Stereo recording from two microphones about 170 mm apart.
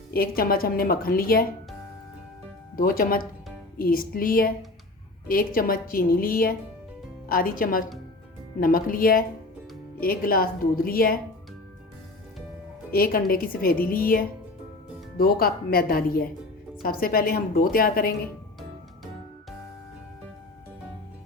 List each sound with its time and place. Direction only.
0.1 s a woman's voice: 60° left (ahead or behind)
2.7 s a woman's voice: 55° left (ahead or behind)
12.9 s a woman's voice: 60° left (ahead or behind)